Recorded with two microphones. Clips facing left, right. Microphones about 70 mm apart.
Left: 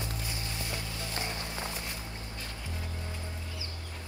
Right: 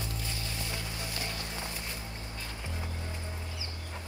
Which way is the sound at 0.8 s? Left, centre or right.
Right.